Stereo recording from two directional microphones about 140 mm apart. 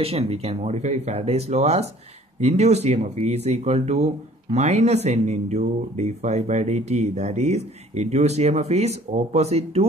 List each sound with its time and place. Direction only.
0.0 s speech: 45° right (ahead or behind)